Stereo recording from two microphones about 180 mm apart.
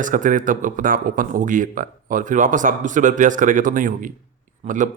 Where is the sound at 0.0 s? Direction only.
45° right (ahead or behind).